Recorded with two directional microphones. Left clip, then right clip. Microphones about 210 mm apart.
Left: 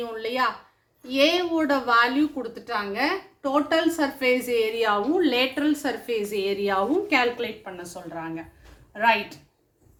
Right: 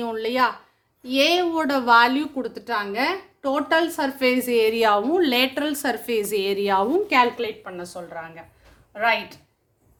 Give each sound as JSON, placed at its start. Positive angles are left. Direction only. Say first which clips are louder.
{"t": 0.0, "sound": "a woman's voice", "louder": "right 4 dB", "side_deg": -50}